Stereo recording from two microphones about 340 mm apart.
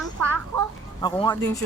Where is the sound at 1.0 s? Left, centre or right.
Centre.